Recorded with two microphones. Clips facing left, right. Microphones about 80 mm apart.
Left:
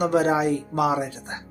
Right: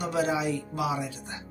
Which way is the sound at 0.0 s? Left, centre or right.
Left.